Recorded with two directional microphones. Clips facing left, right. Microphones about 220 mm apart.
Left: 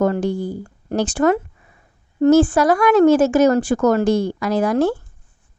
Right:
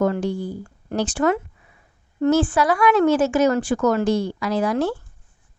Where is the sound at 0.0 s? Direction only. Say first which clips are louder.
Left 3 dB; 45° left (ahead or behind).